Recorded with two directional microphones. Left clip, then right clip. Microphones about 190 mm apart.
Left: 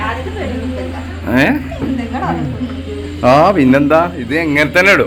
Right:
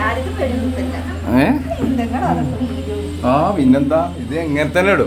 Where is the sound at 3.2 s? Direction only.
25° left (ahead or behind).